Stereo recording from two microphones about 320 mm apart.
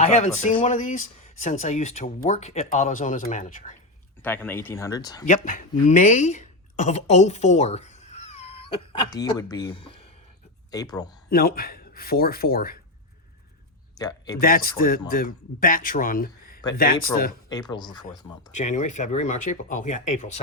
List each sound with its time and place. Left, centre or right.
0.0 s speech: left
4.2 s speech: centre
11.3 s speech: left
13.9 s speech: centre
14.3 s speech: left
17.5 s speech: centre